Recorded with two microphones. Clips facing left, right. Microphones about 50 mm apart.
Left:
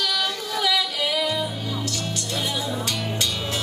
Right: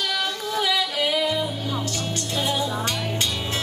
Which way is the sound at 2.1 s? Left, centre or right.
Right.